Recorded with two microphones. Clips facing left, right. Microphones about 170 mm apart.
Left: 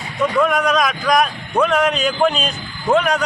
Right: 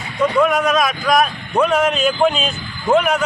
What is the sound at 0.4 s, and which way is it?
A man's voice, 5° right (ahead or behind).